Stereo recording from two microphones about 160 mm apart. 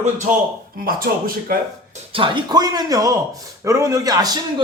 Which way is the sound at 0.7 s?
65° right (ahead or behind).